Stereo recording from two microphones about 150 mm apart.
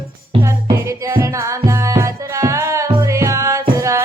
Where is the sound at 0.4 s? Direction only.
20° right (ahead or behind).